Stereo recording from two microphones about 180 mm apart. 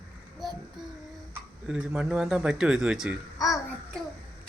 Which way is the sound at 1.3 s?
5° right (ahead or behind).